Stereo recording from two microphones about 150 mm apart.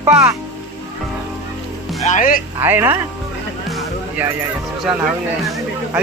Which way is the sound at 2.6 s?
15° right (ahead or behind).